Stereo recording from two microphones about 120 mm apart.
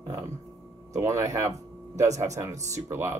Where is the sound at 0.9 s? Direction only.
25° right (ahead or behind).